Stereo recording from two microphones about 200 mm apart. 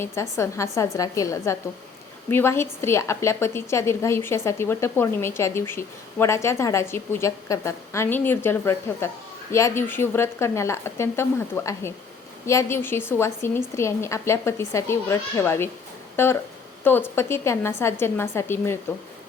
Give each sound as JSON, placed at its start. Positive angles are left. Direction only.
{"t": 0.0, "sound": "a woman's voice", "side_deg": 15}